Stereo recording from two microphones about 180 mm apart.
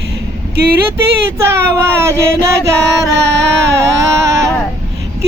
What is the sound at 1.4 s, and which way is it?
Speech, 15° right (ahead or behind).